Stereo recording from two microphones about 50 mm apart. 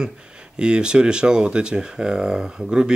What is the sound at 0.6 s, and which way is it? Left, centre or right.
Speech, centre.